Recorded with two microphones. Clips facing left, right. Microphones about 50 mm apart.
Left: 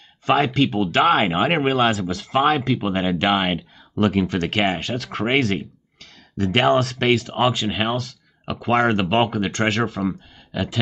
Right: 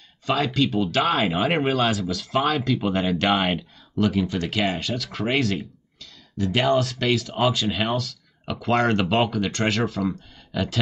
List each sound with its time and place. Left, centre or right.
0.3 s speech: left
2.8 s speech: centre
3.9 s speech: left
6.6 s speech: left
7.0 s speech: left
7.5 s speech: centre
9.3 s speech: left
9.6 s speech: centre